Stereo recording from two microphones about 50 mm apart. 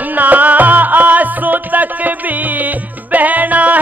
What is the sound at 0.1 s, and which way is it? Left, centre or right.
Music, right.